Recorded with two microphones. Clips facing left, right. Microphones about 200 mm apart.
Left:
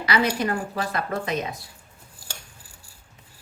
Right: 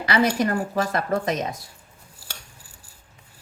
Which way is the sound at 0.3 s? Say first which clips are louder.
Right 3 dB; 45° right (ahead or behind).